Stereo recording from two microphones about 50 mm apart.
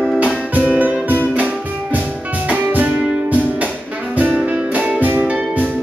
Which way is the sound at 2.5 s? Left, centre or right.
Right.